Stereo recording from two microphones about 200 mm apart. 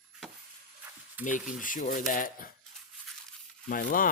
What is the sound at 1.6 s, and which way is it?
Speech, 40° left (ahead or behind).